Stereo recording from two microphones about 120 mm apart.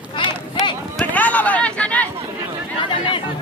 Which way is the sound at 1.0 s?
10° left (ahead or behind).